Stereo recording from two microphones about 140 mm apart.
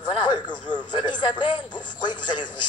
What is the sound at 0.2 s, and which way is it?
Speech, 30° left (ahead or behind).